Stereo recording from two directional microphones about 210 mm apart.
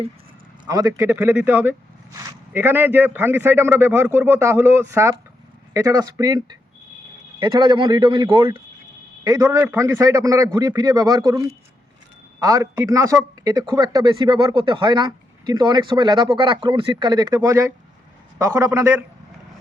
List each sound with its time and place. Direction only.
0.6 s a man's voice: 15° right (ahead or behind)